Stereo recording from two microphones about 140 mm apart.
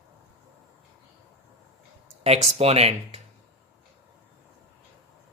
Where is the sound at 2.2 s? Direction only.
45° right (ahead or behind).